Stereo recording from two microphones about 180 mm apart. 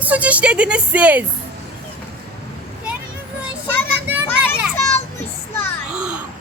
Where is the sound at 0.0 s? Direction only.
10° right (ahead or behind).